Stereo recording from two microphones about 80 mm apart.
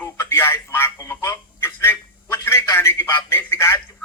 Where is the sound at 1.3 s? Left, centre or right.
Left.